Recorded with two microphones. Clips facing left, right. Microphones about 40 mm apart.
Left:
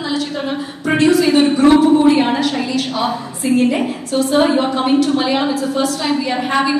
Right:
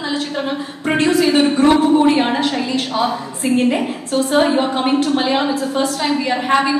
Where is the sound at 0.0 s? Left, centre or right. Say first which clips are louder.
Left 1 dB; right.